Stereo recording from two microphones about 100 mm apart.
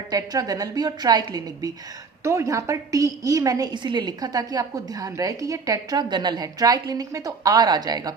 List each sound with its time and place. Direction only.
0.1 s a woman's voice: 40° right (ahead or behind)